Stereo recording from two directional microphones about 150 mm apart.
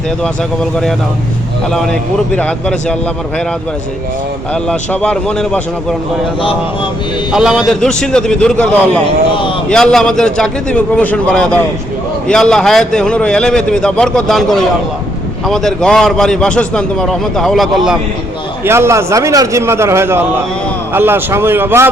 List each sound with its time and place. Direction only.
1.7 s a man's voice: 5° left (ahead or behind)
4.5 s a man's voice: 5° left (ahead or behind)
7.3 s a man's voice: 5° right (ahead or behind)
18.6 s a man's voice: 15° right (ahead or behind)